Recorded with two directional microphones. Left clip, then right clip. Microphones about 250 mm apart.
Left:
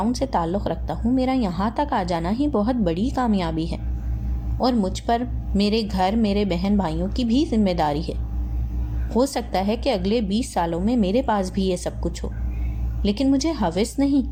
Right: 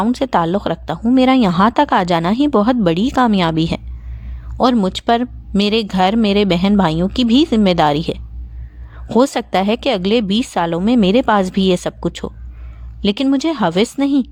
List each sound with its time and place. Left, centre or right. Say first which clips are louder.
0.0 s speech: right 7 dB; right